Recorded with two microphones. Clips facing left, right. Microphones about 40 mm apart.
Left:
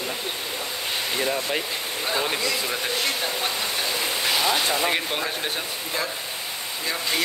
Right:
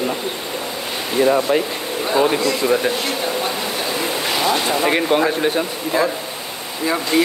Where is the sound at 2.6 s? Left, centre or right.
Centre.